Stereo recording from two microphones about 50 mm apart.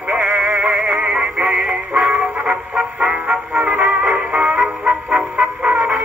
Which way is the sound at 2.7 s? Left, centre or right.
Right.